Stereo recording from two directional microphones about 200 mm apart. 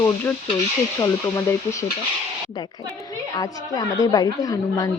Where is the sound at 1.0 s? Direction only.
15° left (ahead or behind).